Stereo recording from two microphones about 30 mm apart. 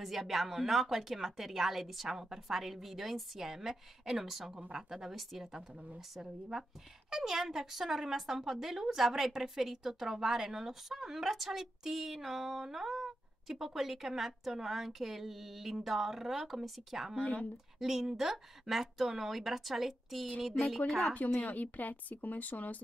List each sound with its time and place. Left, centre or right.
0.0 s a woman's voice: centre
7.1 s a woman's voice: centre
17.2 s speech: left
17.7 s a woman's voice: centre
21.1 s a woman's voice: left